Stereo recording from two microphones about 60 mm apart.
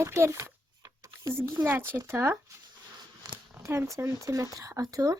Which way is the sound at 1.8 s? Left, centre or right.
Right.